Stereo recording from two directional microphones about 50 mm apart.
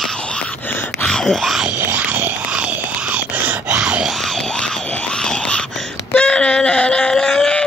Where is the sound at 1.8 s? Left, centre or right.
Right.